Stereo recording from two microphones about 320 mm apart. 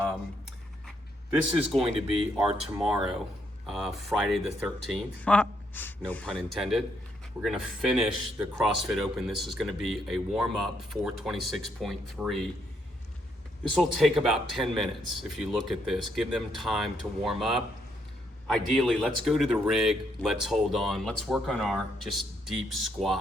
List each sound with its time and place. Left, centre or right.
1.4 s speech: centre
2.1 s speech: centre
3.7 s speech: centre
13.7 s speech: centre